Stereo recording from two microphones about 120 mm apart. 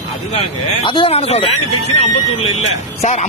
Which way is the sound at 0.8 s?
45° left (ahead or behind).